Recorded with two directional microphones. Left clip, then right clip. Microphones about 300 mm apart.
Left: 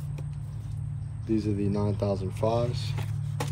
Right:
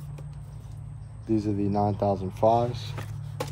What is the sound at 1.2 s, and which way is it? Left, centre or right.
Speech, right.